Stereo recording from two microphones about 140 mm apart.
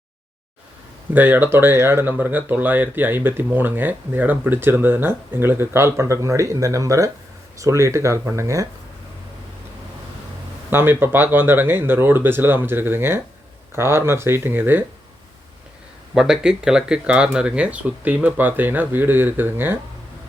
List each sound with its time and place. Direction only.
1.1 s speech: 15° right (ahead or behind)
10.7 s speech: 15° right (ahead or behind)
16.1 s speech: 5° right (ahead or behind)